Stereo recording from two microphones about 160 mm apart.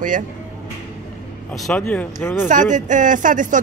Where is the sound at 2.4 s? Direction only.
50° right (ahead or behind).